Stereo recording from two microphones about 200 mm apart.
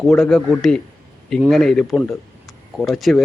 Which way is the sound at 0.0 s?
Centre (ahead or behind).